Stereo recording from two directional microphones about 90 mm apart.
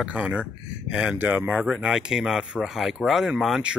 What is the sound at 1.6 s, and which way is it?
Speech, 5° right (ahead or behind).